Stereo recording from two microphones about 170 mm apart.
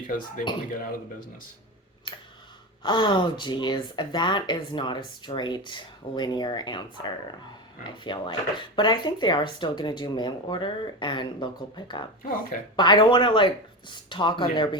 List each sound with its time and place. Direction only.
0.1 s speech: 55° left (ahead or behind)
2.8 s speech: 25° left (ahead or behind)
12.7 s speech: 25° left (ahead or behind)